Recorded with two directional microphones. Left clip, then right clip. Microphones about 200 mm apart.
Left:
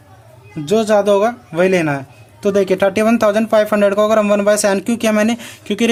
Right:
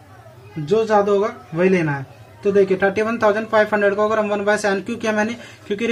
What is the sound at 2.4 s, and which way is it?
Speech, 50° left (ahead or behind).